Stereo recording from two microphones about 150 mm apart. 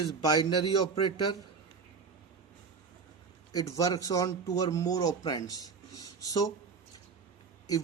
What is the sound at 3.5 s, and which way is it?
Speech, 25° left (ahead or behind).